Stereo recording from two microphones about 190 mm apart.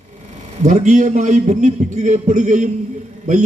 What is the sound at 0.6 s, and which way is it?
A man's voice, 35° right (ahead or behind).